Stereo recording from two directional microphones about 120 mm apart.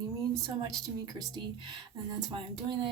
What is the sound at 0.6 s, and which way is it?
Speech, 35° right (ahead or behind).